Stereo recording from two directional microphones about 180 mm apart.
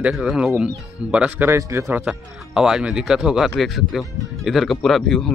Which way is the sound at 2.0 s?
5° right (ahead or behind).